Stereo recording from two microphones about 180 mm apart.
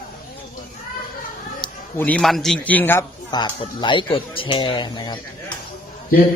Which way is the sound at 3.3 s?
25° left (ahead or behind).